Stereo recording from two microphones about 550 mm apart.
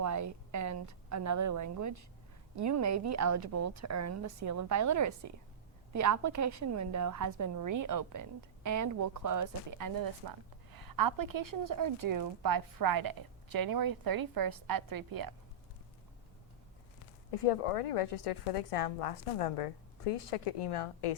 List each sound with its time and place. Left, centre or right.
0.0 s a woman's voice: right
17.3 s a woman's voice: left